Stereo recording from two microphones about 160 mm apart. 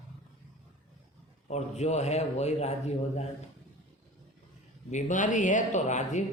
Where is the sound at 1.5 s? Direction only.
45° left (ahead or behind).